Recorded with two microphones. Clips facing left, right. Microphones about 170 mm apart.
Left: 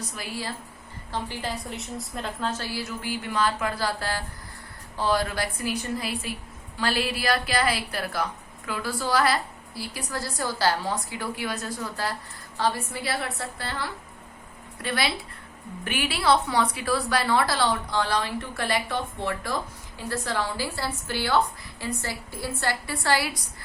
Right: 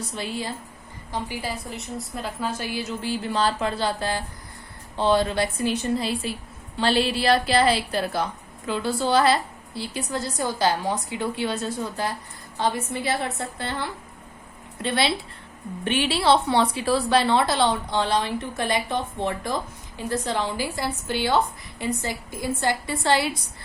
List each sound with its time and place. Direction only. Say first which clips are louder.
0.0 s a woman's voice: right 4 dB; 25° right (ahead or behind)
1.1 s a woman's voice: right 1 dB; 10° right (ahead or behind)